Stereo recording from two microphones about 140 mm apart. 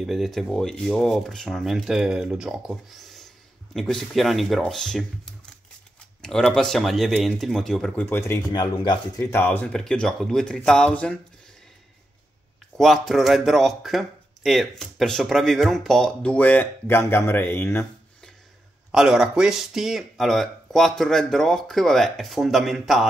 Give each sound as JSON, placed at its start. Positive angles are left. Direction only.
{"t": 0.0, "sound": "speech", "side_deg": 0}
{"t": 8.5, "sound": "speech", "side_deg": 30}
{"t": 9.2, "sound": "speech", "side_deg": 15}
{"t": 12.7, "sound": "speech", "side_deg": 0}
{"t": 18.9, "sound": "speech", "side_deg": -5}